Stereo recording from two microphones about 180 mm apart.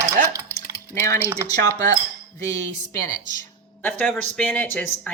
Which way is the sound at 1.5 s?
20° left (ahead or behind).